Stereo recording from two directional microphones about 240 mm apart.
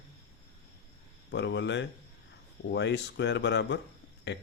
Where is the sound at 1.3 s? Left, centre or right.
Left.